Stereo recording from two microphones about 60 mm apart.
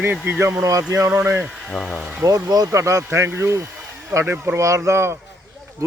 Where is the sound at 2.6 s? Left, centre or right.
Right.